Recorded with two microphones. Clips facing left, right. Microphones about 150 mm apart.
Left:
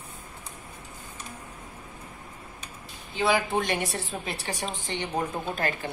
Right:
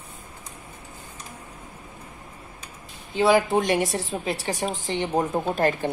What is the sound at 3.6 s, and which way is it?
A woman's voice, 35° right (ahead or behind).